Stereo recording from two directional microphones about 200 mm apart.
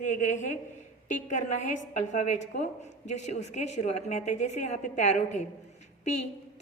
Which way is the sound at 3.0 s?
35° left (ahead or behind).